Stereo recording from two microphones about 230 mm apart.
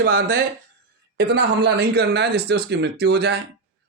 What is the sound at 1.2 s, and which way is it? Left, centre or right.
Speech, right.